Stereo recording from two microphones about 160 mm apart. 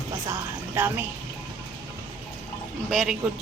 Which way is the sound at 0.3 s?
15° right (ahead or behind).